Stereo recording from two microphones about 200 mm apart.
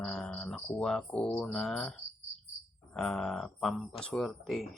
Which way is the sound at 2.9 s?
5° left (ahead or behind).